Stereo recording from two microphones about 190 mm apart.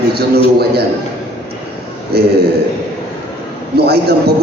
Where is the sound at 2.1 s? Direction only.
55° right (ahead or behind).